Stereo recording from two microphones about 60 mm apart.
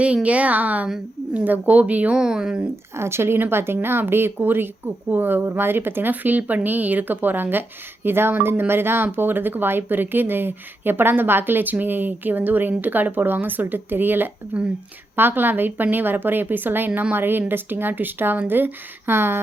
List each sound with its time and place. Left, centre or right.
0.0 s a woman's voice: right
2.1 s speech: centre
2.9 s a woman's voice: right